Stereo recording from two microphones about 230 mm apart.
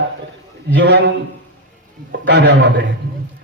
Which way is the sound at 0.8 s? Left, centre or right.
Right.